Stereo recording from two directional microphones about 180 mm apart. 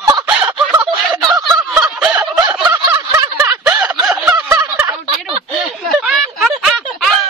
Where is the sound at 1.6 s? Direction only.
5° right (ahead or behind).